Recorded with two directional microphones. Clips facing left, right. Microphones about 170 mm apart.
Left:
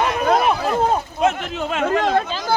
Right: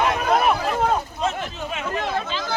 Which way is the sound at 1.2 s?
65° left (ahead or behind).